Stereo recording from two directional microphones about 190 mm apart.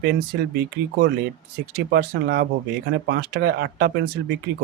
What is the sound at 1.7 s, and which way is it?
Speech, 55° right (ahead or behind).